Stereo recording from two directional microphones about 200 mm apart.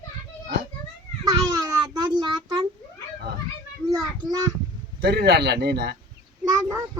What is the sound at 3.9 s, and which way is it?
Speech, 20° right (ahead or behind).